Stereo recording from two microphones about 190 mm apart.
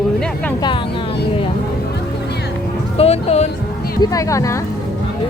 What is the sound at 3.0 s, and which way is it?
Speech, 35° left (ahead or behind).